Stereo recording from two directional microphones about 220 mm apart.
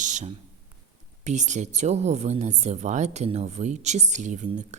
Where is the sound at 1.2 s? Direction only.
30° right (ahead or behind).